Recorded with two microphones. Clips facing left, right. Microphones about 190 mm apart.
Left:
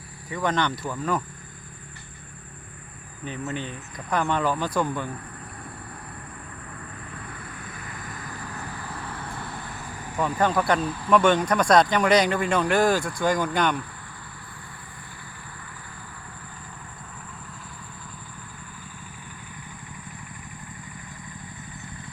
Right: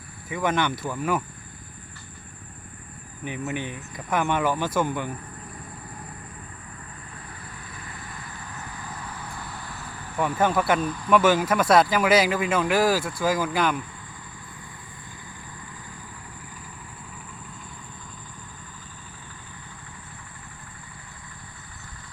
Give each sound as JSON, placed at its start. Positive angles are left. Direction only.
{"t": 0.3, "sound": "speech", "side_deg": -10}
{"t": 3.2, "sound": "speech", "side_deg": -15}
{"t": 7.7, "sound": "vehicle", "side_deg": 45}
{"t": 10.2, "sound": "speech", "side_deg": -5}